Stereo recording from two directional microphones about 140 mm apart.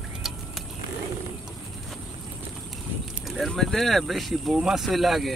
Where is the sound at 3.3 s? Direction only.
Centre (ahead or behind).